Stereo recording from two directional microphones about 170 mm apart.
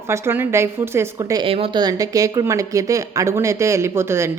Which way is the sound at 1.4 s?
35° right (ahead or behind).